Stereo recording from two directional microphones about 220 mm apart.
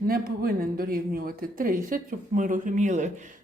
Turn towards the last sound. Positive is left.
turn(degrees=-35)  # may be behind; listen again after turning